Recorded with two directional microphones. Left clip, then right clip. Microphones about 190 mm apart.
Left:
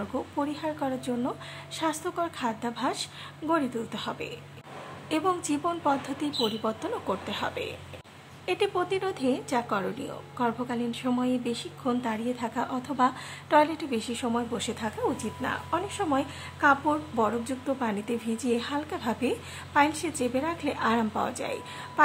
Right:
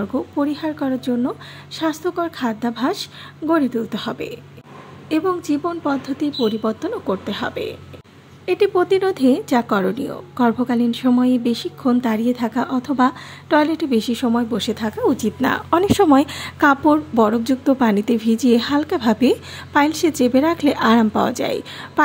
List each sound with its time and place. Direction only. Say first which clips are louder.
0.0 s a woman's voice: right 9 dB; 25° right (ahead or behind)